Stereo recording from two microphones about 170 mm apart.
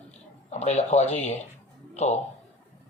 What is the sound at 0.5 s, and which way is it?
Speech, 40° left (ahead or behind).